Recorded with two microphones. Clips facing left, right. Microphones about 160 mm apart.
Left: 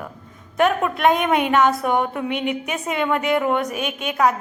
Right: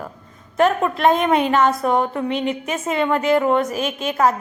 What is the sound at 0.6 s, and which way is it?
A woman's voice, centre (ahead or behind).